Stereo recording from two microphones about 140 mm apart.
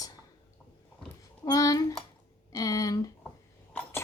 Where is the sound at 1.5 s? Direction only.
25° left (ahead or behind).